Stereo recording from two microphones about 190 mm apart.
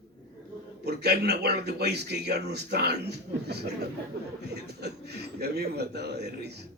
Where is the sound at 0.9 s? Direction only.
60° right (ahead or behind).